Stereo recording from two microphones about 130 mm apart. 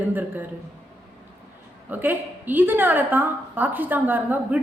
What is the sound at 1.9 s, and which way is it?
A woman's voice, 15° right (ahead or behind).